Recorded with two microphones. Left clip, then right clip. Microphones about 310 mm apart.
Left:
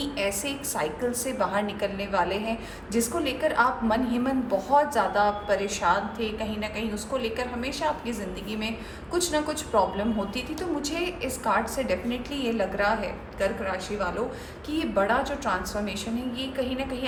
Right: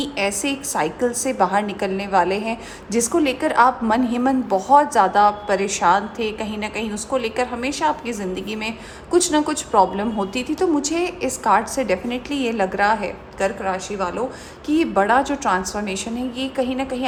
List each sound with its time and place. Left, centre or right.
0.0 s a woman's voice: right